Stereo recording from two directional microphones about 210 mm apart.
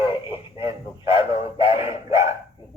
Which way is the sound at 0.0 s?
25° left (ahead or behind).